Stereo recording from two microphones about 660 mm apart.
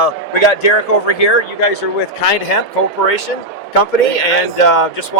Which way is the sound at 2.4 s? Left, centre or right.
Left.